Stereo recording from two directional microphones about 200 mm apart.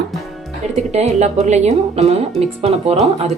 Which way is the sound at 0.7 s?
35° right (ahead or behind).